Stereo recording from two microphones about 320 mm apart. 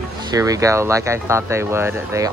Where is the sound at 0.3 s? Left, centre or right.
Centre.